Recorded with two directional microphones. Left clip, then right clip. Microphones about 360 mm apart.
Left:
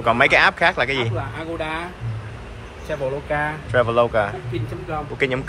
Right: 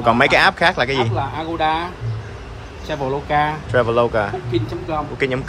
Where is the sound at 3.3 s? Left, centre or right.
Right.